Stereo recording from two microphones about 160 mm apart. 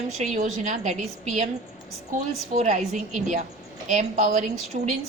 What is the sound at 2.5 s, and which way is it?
A woman's voice, 50° right (ahead or behind).